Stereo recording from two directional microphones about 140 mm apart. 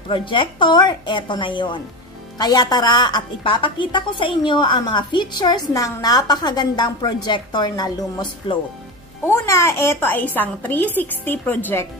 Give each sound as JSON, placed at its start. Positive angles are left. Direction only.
{"t": 0.1, "sound": "a woman's voice", "side_deg": 35}
{"t": 9.3, "sound": "a woman's voice", "side_deg": 20}